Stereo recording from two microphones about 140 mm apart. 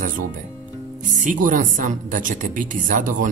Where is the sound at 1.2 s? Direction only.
70° right (ahead or behind).